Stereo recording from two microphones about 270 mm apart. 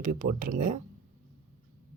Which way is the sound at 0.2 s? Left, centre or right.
Right.